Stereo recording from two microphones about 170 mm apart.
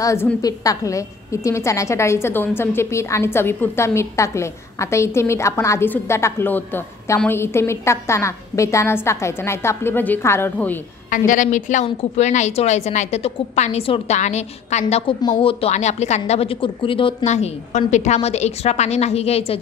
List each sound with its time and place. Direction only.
0.0 s a woman's voice: 15° left (ahead or behind)
11.1 s a woman's voice: 50° left (ahead or behind)